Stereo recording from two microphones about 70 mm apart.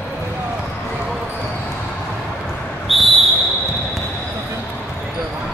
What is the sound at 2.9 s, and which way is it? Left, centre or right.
Whistle, centre.